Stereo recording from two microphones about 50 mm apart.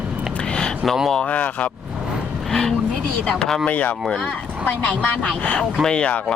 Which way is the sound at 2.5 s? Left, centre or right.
Centre.